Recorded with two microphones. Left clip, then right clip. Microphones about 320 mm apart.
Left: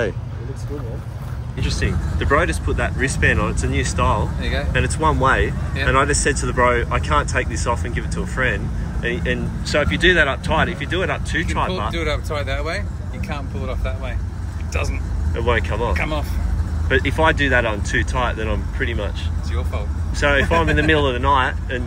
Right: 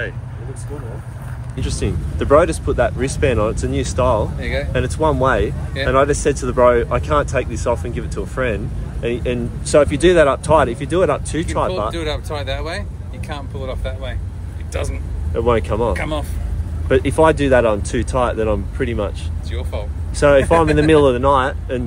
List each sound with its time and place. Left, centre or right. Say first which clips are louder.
1.8 s speech: right 3 dB; centre
4.4 s speech: right 2 dB; right
4.7 s speech: right 1 dB; centre
11.9 s speech: even; right
15.3 s speech: right 4 dB; centre
16.0 s speech: right 1 dB; right
16.9 s speech: right 4 dB; centre